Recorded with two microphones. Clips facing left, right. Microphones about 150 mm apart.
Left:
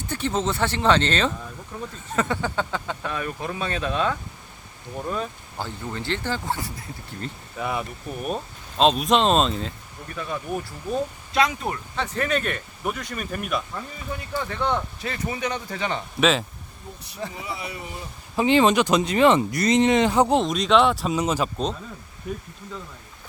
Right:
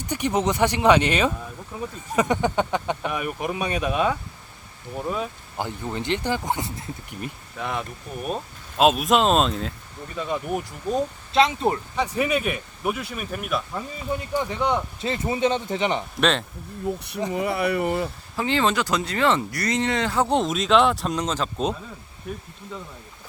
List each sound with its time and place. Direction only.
0.0 s speech: 15° right (ahead or behind)
5.5 s speech: 15° right (ahead or behind)
7.6 s speech: 5° left (ahead or behind)
10.2 s speech: 20° right (ahead or behind)
11.9 s speech: 10° right (ahead or behind)
13.7 s speech: 15° right (ahead or behind)
15.0 s speech: 25° right (ahead or behind)
17.3 s speech: 60° right (ahead or behind)
18.3 s speech: 20° left (ahead or behind)
20.3 s speech: centre (ahead or behind)